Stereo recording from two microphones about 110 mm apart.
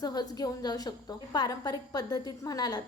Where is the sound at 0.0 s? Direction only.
35° left (ahead or behind).